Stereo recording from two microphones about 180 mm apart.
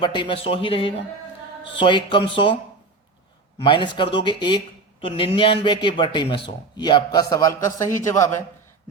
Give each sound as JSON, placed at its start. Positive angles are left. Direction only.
{"t": 0.0, "sound": "speech", "side_deg": 25}
{"t": 3.6, "sound": "speech", "side_deg": 25}